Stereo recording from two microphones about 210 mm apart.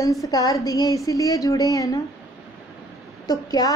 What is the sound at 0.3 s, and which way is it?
A woman's voice, 15° left (ahead or behind).